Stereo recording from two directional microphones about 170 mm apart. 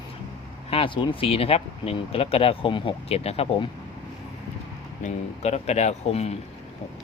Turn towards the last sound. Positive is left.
turn(degrees=40)  # may be behind; listen again after turning